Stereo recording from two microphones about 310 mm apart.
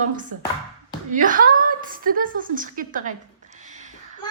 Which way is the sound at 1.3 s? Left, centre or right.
Right.